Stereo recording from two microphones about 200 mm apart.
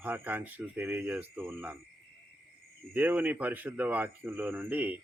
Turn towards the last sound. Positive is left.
turn(degrees=-10)  # may be behind; listen again after turning